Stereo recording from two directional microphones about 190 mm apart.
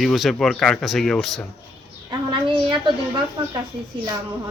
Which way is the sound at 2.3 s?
25° right (ahead or behind).